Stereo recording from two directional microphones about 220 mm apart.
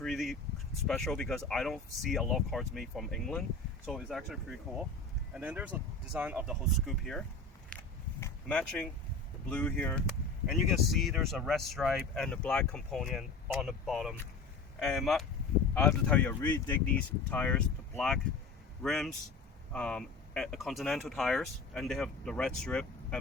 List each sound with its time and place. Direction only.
0.0 s a sound: centre (ahead or behind)
0.9 s speech: centre (ahead or behind)
7.7 s biting: 5° left (ahead or behind)
8.2 s speech: 5° left (ahead or behind)